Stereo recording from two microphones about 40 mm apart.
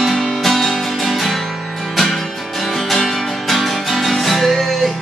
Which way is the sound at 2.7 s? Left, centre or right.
Centre.